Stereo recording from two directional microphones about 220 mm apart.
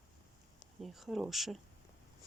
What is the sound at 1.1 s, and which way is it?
Speech, centre (ahead or behind).